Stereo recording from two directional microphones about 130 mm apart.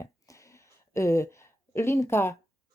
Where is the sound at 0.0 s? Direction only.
25° left (ahead or behind).